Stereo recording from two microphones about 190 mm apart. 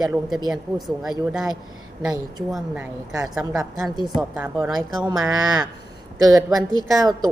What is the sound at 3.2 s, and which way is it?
A woman's voice, centre (ahead or behind).